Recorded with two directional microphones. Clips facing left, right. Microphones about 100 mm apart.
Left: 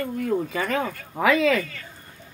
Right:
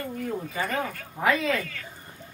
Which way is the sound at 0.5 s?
90° left.